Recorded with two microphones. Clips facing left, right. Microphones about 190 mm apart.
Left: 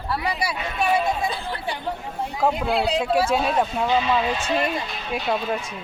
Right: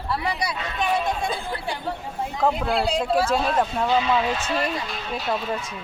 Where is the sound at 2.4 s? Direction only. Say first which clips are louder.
Left 1 dB; centre (ahead or behind).